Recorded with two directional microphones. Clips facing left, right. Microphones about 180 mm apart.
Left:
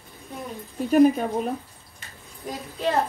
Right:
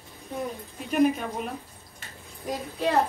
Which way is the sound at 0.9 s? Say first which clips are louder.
Left 6 dB; 35° left (ahead or behind).